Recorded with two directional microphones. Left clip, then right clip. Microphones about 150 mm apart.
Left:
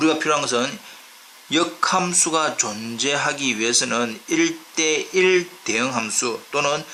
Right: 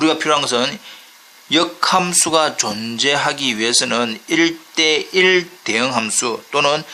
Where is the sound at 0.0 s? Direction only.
40° right (ahead or behind).